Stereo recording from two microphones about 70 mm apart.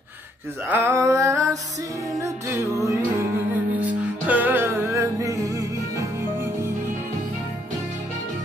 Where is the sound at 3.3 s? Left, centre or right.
Right.